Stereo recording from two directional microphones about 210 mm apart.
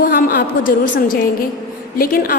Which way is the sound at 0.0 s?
45° left (ahead or behind).